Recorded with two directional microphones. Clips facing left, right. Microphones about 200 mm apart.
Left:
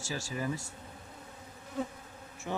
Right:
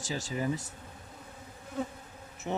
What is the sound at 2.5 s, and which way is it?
Speech, 20° right (ahead or behind).